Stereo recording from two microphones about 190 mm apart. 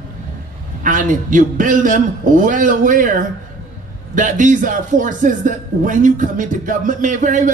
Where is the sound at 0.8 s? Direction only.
45° right (ahead or behind).